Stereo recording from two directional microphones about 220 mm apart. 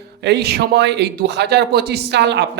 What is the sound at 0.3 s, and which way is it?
A man's voice, 50° right (ahead or behind).